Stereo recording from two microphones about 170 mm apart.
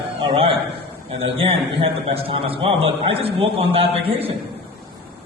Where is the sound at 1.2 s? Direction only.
35° right (ahead or behind).